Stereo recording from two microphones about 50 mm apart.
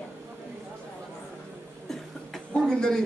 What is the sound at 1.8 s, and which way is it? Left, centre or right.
Cough, centre.